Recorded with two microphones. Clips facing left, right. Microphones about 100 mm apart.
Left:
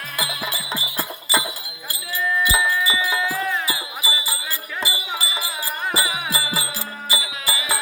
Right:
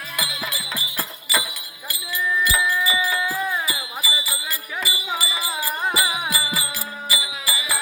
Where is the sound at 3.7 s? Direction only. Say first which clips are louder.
Left 1 dB; 30° left (ahead or behind).